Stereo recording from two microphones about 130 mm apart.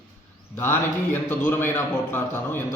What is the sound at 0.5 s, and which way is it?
A man's voice, 15° left (ahead or behind).